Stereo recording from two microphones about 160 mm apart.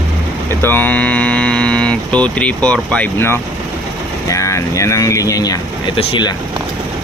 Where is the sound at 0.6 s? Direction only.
10° left (ahead or behind); by 6.3 s 30° left (ahead or behind).